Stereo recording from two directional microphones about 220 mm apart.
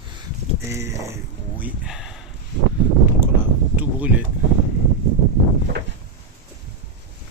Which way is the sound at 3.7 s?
5° right (ahead or behind).